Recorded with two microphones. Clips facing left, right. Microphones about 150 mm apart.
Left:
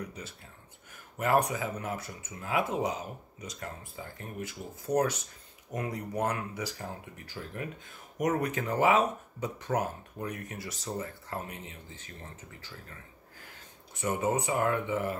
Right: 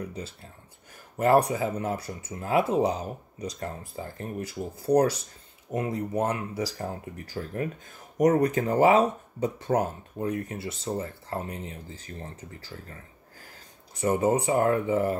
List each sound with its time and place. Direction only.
1.1 s speech: 35° right (ahead or behind)
14.0 s speech: 30° right (ahead or behind)